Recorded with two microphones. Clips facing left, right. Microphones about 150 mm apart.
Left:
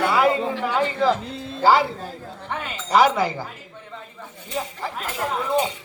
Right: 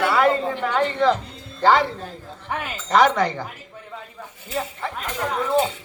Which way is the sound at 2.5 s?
5° right (ahead or behind).